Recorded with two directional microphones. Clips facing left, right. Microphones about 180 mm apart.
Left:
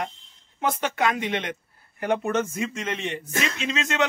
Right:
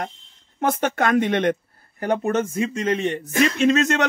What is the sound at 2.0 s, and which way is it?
Speech, 35° right (ahead or behind).